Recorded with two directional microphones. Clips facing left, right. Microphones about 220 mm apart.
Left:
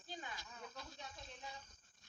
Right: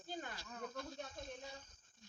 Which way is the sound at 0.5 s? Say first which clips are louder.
Right 7 dB; 50° right (ahead or behind).